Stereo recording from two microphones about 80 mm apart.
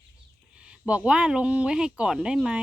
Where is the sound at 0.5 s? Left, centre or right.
Centre.